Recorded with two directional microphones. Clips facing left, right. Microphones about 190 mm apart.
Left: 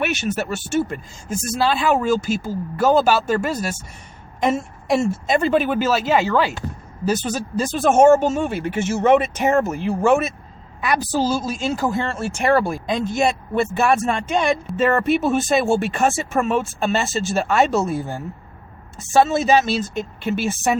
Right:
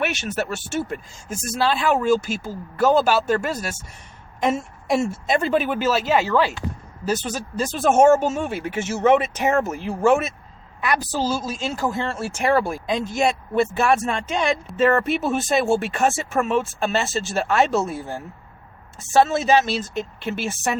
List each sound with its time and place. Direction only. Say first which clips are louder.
0.0 s speech: left 2 dB; centre (ahead or behind)